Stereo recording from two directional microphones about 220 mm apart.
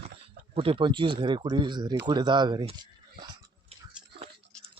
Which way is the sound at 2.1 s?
20° right (ahead or behind).